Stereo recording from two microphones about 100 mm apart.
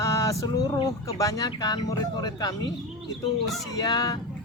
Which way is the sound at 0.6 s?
45° left (ahead or behind).